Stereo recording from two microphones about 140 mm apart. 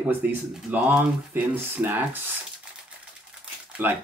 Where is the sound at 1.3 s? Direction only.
15° right (ahead or behind).